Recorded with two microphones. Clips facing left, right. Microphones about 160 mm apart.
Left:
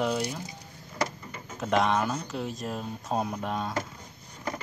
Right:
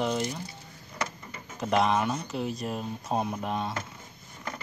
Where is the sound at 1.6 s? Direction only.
Centre (ahead or behind).